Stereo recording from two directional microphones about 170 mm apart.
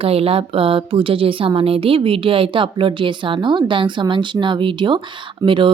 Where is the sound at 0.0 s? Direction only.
35° right (ahead or behind).